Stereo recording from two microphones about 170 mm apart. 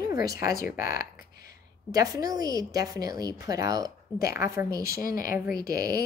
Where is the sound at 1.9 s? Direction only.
20° right (ahead or behind).